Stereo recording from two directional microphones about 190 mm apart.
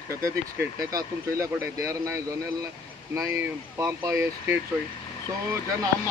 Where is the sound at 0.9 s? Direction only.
15° right (ahead or behind).